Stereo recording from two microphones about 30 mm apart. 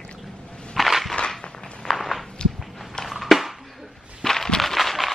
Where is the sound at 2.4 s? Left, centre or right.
Left.